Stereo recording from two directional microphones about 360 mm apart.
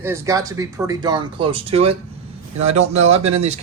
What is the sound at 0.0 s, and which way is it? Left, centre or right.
A man's voice, centre.